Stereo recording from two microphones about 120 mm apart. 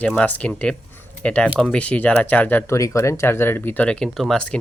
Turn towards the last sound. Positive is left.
turn(degrees=5)  # may be behind; listen again after turning